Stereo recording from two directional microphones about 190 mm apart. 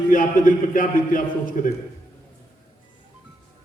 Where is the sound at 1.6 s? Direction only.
45° left (ahead or behind).